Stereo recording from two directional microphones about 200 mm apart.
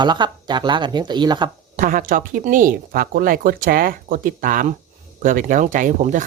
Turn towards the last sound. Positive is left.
turn(degrees=-40)  # may be behind; listen again after turning